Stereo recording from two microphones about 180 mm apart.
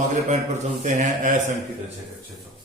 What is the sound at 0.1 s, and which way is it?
A man's voice, 40° right (ahead or behind).